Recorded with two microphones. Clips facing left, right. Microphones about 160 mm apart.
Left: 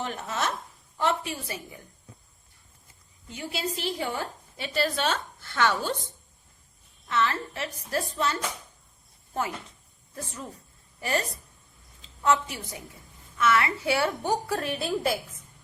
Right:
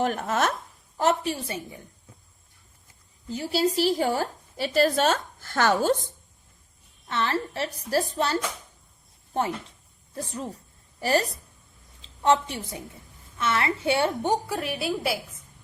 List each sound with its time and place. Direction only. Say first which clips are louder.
0.0 s speech: right 6 dB; 50° right (ahead or behind)
0.9 s a woman's voice: right 4 dB; 35° right (ahead or behind)
3.2 s a woman's voice: right 8 dB; 35° right (ahead or behind)
7.1 s a woman's voice: even; 30° right (ahead or behind)
10.2 s a woman's voice: right 5 dB; 35° right (ahead or behind); by 15.2 s 5° right (ahead or behind)